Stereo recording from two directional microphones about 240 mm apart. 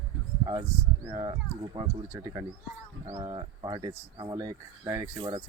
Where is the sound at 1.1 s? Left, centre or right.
Centre.